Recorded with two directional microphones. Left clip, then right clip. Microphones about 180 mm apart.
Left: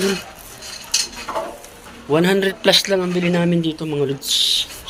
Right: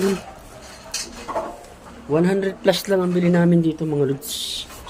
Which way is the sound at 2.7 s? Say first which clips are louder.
Left 4 dB; 20° right (ahead or behind).